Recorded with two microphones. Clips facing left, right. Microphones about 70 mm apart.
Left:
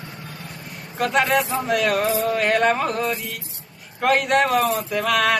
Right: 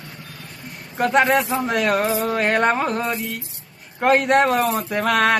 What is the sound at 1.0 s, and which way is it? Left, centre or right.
Speech, right.